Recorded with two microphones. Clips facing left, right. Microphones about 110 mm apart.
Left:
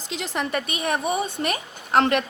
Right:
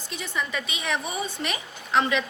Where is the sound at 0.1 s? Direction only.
60° left (ahead or behind).